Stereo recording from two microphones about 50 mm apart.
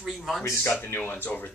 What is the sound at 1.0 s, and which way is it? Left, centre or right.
Speech, left.